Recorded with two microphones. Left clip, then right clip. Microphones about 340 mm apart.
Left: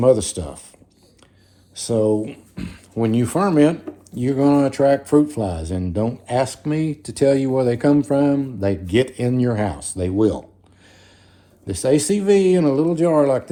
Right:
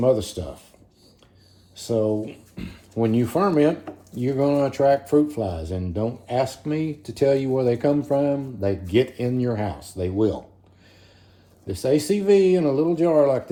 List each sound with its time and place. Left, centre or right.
0.0 s speech: left
1.7 s speech: left
11.7 s speech: left